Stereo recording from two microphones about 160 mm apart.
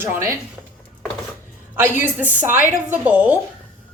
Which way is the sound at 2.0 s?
10° right (ahead or behind).